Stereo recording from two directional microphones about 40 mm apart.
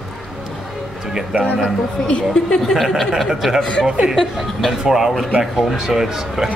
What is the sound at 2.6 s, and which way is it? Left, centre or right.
Speech, centre.